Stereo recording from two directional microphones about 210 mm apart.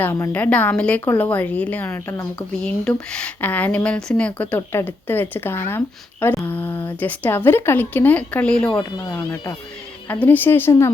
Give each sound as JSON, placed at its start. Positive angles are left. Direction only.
{"t": 0.0, "sound": "speech", "side_deg": 10}
{"t": 8.8, "sound": "speech", "side_deg": 15}